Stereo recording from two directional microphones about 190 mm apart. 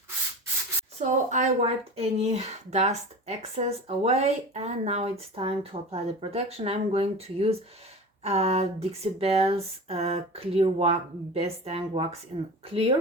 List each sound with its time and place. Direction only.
0.9 s speech: 40° right (ahead or behind)